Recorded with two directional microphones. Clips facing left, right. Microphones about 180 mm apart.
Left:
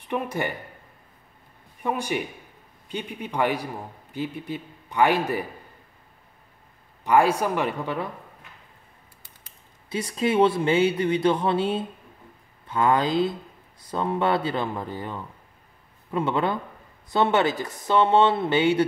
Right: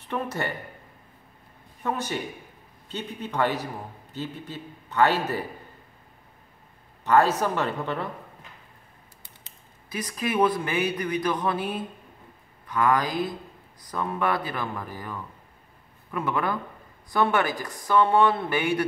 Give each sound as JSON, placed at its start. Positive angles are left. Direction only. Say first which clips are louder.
{"t": 0.1, "sound": "a man's voice", "louder": "left 2 dB", "side_deg": 15}
{"t": 1.8, "sound": "a man's voice", "louder": "left 2 dB", "side_deg": 10}
{"t": 7.1, "sound": "a man's voice", "louder": "left 1 dB", "side_deg": 10}
{"t": 9.8, "sound": "a man's voice", "louder": "left 5 dB", "side_deg": 25}